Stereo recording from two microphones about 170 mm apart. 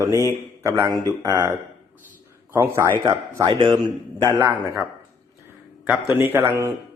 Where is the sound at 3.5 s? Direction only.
30° right (ahead or behind).